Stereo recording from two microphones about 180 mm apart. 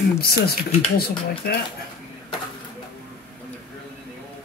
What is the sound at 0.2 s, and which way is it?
Speech, 60° left (ahead or behind).